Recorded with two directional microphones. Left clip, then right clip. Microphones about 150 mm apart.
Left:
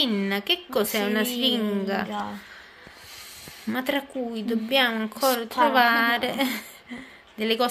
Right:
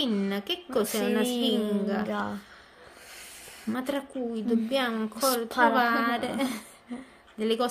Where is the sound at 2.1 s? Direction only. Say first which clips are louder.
Even; 90° right.